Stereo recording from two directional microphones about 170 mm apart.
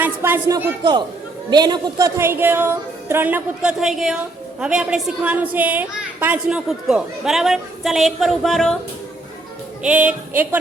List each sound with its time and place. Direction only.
0.0 s a woman's voice: 15° right (ahead or behind); by 8.7 s centre (ahead or behind)
9.8 s a woman's voice: 5° right (ahead or behind)